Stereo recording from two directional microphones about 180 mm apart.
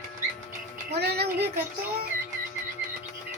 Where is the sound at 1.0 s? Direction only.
65° right (ahead or behind).